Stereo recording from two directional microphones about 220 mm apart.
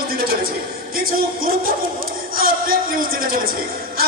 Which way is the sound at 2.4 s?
40° right (ahead or behind).